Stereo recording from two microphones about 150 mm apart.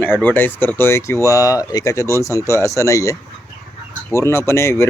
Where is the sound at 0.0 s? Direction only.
10° left (ahead or behind).